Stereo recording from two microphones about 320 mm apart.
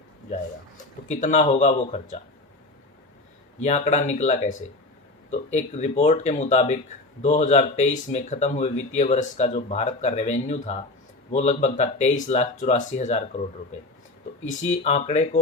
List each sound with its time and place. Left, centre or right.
1.0 s speech: left
3.6 s speech: left
14.7 s speech: left